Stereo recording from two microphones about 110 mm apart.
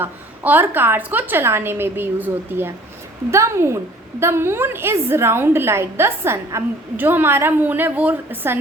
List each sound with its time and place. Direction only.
0.0 s a woman's voice: 20° right (ahead or behind)